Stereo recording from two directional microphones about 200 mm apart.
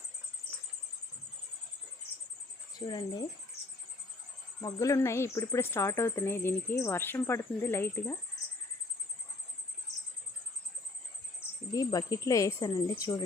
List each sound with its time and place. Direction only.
2.7 s speech: 20° left (ahead or behind)
4.6 s speech: 15° left (ahead or behind)
11.7 s speech: 15° left (ahead or behind)